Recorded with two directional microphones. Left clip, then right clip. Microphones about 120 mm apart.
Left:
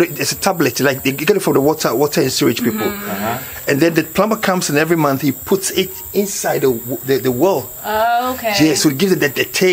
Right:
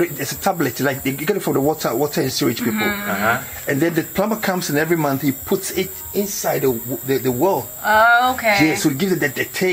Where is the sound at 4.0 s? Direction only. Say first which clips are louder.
Left 5 dB; 45° left (ahead or behind).